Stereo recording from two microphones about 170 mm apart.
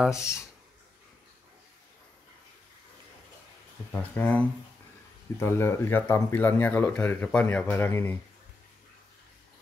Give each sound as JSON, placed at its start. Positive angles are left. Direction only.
{"t": 0.1, "sound": "speech", "side_deg": 15}
{"t": 3.9, "sound": "speech", "side_deg": 10}